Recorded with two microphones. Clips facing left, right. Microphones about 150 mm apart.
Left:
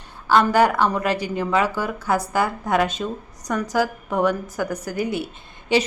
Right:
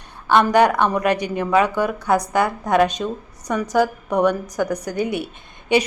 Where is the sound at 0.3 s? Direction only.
20° right (ahead or behind).